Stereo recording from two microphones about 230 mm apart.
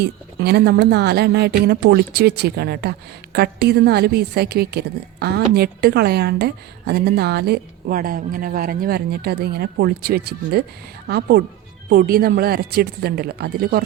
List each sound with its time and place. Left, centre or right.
0.0 s a woman's voice: right